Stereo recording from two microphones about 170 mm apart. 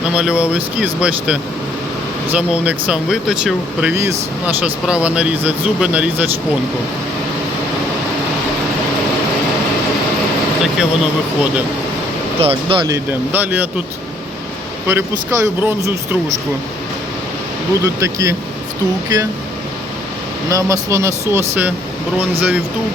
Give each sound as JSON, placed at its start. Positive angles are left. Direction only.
{"t": 0.0, "sound": "speech", "side_deg": -5}
{"t": 10.6, "sound": "speech", "side_deg": -5}
{"t": 12.4, "sound": "speech", "side_deg": -35}
{"t": 13.1, "sound": "speech", "side_deg": -10}
{"t": 14.8, "sound": "speech", "side_deg": -15}
{"t": 17.8, "sound": "speech", "side_deg": -20}
{"t": 20.5, "sound": "speech", "side_deg": -20}